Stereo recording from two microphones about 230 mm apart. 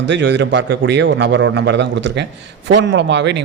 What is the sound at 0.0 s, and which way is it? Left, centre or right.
A man's voice, right.